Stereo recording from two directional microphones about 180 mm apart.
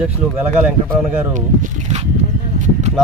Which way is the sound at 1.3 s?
45° right (ahead or behind).